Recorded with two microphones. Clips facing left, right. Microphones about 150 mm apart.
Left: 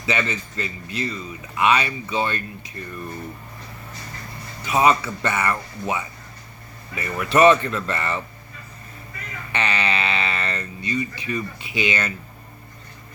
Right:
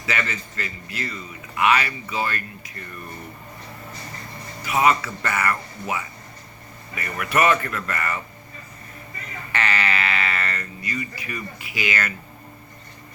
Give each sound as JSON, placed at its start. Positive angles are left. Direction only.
{"t": 0.0, "sound": "a man's voice", "side_deg": 20}
{"t": 4.6, "sound": "a man's voice", "side_deg": 25}
{"t": 9.5, "sound": "a man's voice", "side_deg": 20}